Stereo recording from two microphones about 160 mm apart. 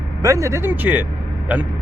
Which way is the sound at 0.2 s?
20° right (ahead or behind).